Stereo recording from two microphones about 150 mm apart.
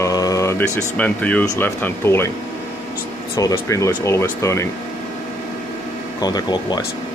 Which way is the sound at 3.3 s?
20° left (ahead or behind).